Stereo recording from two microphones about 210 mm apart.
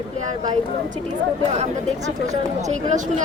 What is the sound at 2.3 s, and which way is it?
Speech, 35° right (ahead or behind).